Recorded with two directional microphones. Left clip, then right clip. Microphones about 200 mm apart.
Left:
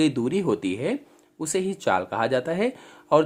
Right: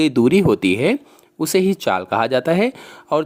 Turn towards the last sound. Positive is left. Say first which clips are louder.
# even
turn(degrees=-40)  # may be behind; listen again after turning